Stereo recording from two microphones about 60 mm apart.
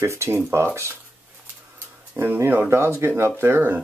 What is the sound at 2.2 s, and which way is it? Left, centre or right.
Speech, right.